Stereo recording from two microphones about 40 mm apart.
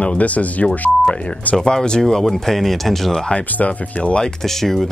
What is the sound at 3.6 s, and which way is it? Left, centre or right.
Speech, left.